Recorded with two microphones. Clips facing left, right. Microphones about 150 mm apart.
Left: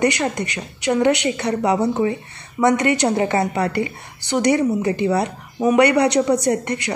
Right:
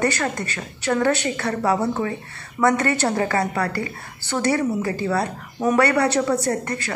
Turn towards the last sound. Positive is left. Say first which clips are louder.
# left 4 dB
turn(degrees=15)  # may be behind; listen again after turning